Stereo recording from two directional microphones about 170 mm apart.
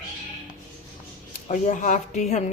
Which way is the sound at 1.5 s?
45° left (ahead or behind).